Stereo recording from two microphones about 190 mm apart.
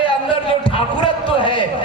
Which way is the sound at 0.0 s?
30° left (ahead or behind).